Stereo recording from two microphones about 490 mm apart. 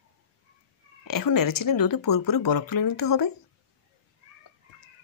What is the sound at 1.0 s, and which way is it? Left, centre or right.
Speech, left.